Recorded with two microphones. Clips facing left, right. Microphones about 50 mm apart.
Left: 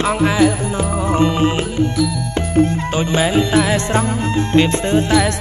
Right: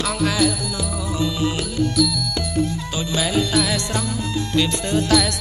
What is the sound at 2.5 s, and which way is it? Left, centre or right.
Music, left.